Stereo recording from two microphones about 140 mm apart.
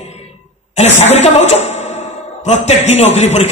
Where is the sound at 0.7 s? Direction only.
55° left (ahead or behind).